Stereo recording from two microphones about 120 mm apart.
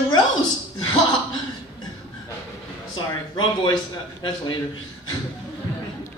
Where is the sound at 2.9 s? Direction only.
40° left (ahead or behind).